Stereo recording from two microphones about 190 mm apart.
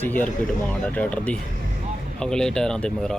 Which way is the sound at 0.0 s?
10° left (ahead or behind).